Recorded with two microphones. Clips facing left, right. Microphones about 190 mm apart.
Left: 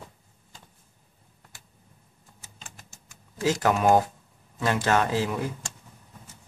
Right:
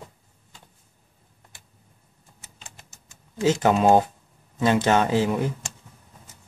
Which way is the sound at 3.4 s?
25° right (ahead or behind).